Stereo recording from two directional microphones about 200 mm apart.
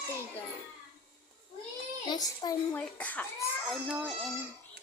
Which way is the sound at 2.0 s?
20° left (ahead or behind).